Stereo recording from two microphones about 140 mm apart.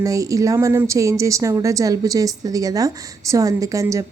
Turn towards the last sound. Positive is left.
turn(degrees=-25)  # may be behind; listen again after turning